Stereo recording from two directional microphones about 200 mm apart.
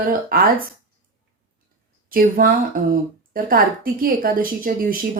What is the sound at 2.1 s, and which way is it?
Speech, 45° right (ahead or behind).